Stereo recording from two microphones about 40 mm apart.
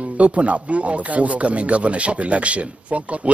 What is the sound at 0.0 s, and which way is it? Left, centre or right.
A man's voice, right.